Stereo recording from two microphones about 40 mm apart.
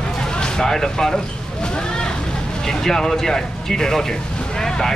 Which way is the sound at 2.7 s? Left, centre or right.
Centre.